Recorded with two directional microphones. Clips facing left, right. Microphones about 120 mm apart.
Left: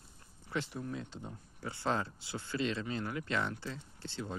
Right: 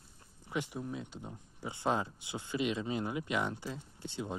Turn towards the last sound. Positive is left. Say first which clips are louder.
# right 2 dB
turn(degrees=-15)  # may be behind; listen again after turning